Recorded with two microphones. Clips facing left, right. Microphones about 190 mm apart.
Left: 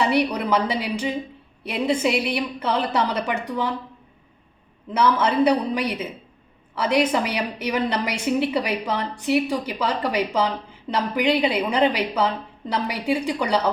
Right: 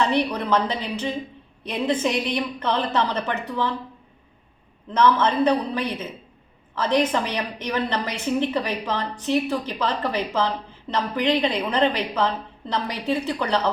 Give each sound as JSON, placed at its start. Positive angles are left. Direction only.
{"t": 0.0, "sound": "a woman's voice", "side_deg": 10}
{"t": 4.9, "sound": "a woman's voice", "side_deg": 10}